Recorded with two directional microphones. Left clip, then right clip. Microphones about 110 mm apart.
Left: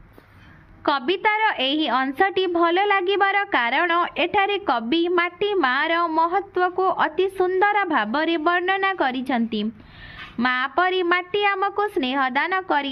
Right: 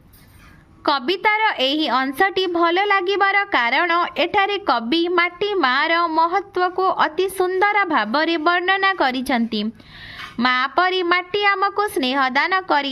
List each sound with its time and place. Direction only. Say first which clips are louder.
0.9 s a woman's voice: right 2 dB; 35° right (ahead or behind)